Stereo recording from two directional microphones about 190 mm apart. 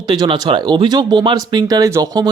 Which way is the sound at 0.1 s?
20° right (ahead or behind).